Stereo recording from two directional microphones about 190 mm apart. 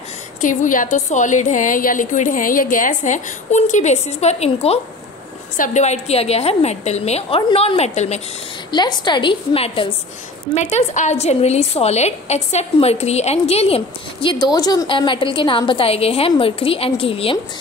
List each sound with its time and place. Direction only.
0.4 s a woman's voice: 45° left (ahead or behind)
8.7 s a woman's voice: 25° left (ahead or behind)